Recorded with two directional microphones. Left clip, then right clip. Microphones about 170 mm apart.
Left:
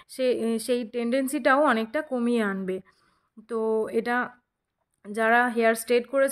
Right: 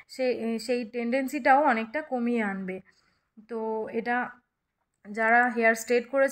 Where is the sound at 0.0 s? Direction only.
35° left (ahead or behind).